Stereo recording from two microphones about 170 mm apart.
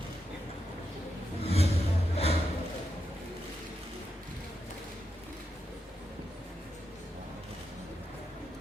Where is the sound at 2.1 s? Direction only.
35° left (ahead or behind).